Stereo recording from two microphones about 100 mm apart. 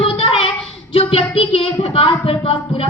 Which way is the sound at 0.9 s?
70° left (ahead or behind).